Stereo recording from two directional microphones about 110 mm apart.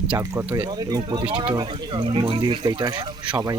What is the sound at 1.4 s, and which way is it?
Speech, 45° right (ahead or behind).